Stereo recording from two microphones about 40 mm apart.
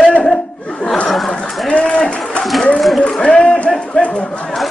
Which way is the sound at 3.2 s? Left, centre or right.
Left.